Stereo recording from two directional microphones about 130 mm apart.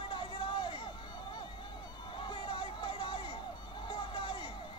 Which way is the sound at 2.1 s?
40° left (ahead or behind).